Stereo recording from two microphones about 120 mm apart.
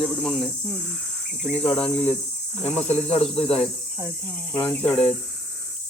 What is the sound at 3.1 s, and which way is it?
Speech, 60° left (ahead or behind).